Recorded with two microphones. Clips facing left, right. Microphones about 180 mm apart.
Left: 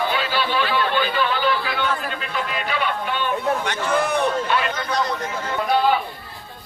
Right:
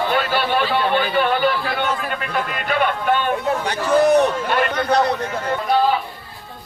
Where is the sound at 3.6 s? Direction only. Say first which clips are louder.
Right 6 dB; 35° right (ahead or behind); by 5.1 s 65° right (ahead or behind).